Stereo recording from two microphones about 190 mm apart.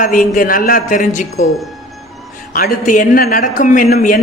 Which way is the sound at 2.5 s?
45° left (ahead or behind).